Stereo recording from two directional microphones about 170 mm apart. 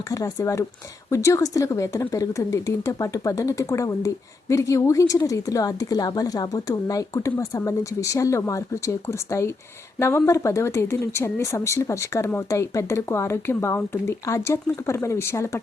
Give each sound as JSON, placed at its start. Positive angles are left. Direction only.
{"t": 0.1, "sound": "a woman's voice", "side_deg": 20}